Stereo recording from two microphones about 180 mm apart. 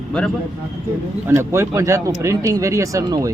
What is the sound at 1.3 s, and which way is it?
Speech, 15° right (ahead or behind).